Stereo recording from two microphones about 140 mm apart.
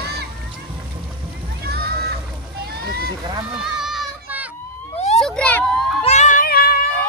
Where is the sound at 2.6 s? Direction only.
90° right.